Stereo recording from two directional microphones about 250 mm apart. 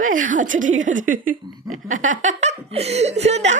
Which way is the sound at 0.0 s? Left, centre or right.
Right.